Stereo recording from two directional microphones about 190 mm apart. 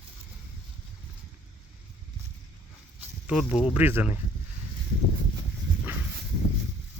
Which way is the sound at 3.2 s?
5° right (ahead or behind).